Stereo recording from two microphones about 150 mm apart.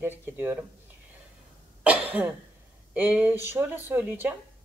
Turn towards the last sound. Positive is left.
turn(degrees=-15)  # may be behind; listen again after turning